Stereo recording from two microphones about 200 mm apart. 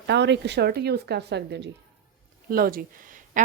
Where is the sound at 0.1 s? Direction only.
60° right (ahead or behind).